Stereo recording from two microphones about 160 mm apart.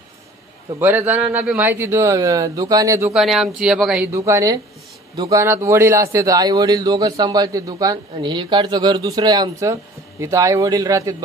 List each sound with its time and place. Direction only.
0.7 s speech: 10° right (ahead or behind)
3.1 s speech: centre (ahead or behind)
4.1 s a man's voice: 20° right (ahead or behind)